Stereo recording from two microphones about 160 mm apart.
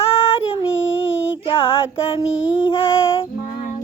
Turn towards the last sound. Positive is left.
turn(degrees=35)  # may be behind; listen again after turning